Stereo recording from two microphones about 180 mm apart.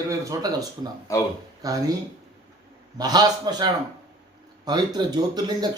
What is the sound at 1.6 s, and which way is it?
Speech, 20° right (ahead or behind).